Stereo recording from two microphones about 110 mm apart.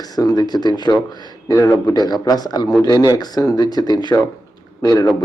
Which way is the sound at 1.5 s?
25° left (ahead or behind).